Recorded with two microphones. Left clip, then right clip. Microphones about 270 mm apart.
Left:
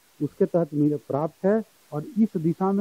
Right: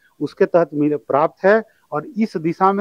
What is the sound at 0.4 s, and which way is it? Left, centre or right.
Speech, centre.